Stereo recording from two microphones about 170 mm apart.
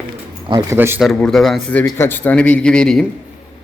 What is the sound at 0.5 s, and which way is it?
Speech, 15° right (ahead or behind).